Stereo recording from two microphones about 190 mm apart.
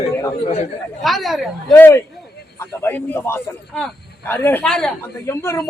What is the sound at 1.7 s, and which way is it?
Speech, 15° left (ahead or behind).